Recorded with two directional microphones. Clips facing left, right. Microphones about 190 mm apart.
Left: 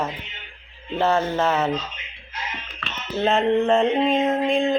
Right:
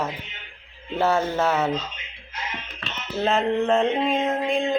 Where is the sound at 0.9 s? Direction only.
10° right (ahead or behind).